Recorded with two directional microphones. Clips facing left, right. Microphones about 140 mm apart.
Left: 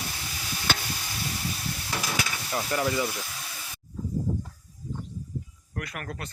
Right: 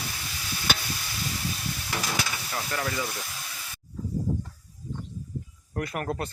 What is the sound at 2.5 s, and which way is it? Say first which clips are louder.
Speech: left 7 dB; 20° left (ahead or behind).